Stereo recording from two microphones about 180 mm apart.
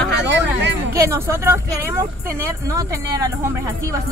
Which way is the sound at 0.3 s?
90° right.